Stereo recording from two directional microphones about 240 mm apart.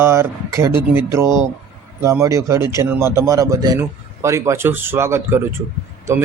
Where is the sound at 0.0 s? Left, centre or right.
Centre.